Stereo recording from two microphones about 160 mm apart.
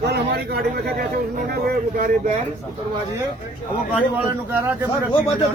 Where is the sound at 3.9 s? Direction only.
10° right (ahead or behind).